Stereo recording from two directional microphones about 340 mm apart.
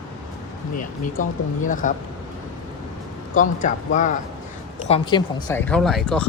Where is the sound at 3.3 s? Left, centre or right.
Left; by 6.2 s centre.